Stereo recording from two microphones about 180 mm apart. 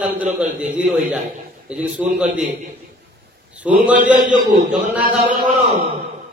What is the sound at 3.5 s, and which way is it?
Speech, 10° right (ahead or behind).